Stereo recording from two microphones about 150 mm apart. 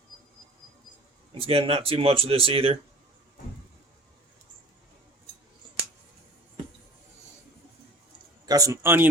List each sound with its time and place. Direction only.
1.3 s speech: 40° right (ahead or behind)
8.4 s speech: 20° right (ahead or behind)